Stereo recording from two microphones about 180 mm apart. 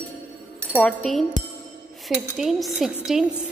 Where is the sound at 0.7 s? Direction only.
5° left (ahead or behind).